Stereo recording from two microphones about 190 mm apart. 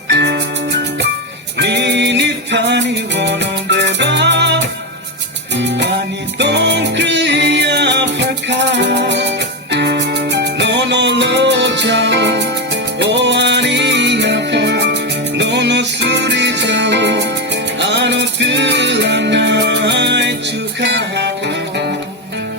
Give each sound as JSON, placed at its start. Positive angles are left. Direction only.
{"t": 0.1, "sound": "music", "side_deg": -60}
{"t": 5.5, "sound": "music", "side_deg": -70}